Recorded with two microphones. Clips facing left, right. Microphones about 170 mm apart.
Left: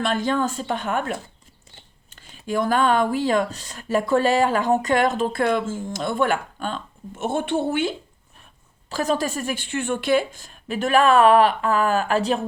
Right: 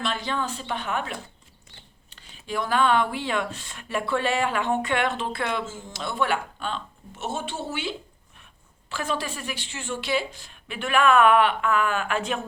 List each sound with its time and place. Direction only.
0.0 s speech: 45° left (ahead or behind)
8.9 s speech: 40° left (ahead or behind)